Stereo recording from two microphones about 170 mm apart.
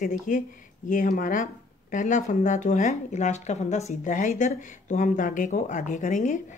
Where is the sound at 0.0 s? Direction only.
50° left (ahead or behind).